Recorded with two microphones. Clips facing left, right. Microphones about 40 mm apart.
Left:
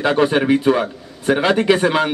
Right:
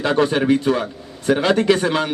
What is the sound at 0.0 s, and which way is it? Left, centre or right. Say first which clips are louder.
A man's voice: left 2 dB; centre.